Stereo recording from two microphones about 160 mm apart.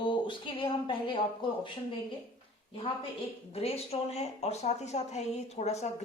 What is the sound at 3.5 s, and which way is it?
Speech, 40° left (ahead or behind).